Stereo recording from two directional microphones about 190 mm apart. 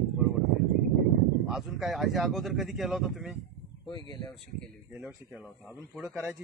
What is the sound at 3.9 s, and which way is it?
Speech, 20° left (ahead or behind).